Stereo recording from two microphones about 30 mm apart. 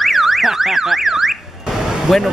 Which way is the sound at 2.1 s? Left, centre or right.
Centre.